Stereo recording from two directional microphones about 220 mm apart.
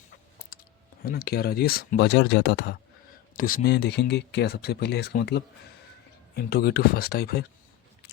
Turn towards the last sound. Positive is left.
turn(degrees=45)  # may be behind; listen again after turning